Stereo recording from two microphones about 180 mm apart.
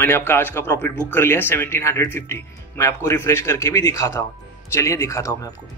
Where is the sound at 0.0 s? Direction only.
10° left (ahead or behind).